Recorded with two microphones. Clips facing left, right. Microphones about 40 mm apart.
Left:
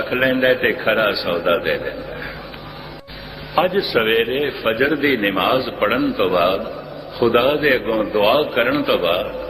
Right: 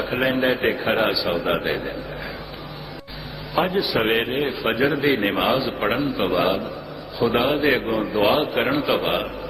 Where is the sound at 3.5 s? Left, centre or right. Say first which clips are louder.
Left 4 dB; centre.